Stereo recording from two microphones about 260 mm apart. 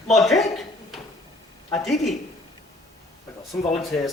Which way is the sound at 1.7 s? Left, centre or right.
Centre.